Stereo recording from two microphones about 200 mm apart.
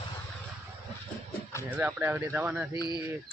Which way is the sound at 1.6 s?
10° right (ahead or behind).